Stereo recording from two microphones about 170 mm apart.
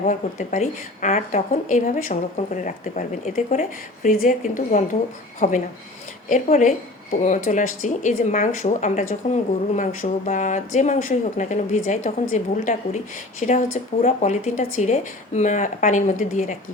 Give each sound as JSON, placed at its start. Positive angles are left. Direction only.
{"t": 0.0, "sound": "speech", "side_deg": 45}